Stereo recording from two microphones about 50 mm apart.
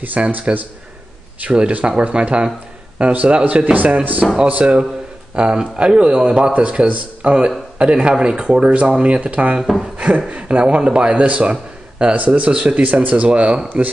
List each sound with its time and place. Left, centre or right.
0.0 s speech: right